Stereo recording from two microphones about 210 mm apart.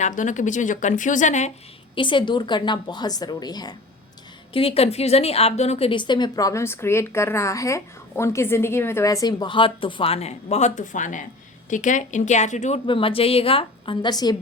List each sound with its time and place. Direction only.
0.0 s speech: 35° left (ahead or behind)
2.0 s a woman's voice: 25° left (ahead or behind)